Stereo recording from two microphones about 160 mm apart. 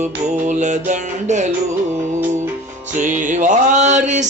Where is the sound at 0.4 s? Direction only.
50° right (ahead or behind).